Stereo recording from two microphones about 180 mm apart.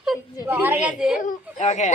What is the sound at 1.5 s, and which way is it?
Speech, 40° left (ahead or behind).